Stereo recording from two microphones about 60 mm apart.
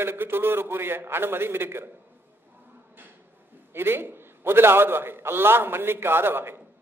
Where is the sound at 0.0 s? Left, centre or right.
Right.